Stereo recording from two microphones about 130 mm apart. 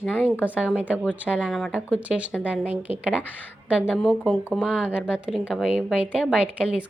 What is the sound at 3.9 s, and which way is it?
A woman's voice, centre (ahead or behind).